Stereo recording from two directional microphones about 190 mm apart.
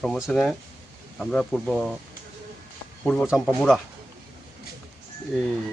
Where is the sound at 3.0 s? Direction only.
Centre (ahead or behind).